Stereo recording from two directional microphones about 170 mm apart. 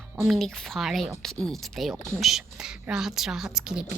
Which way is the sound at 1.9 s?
15° right (ahead or behind).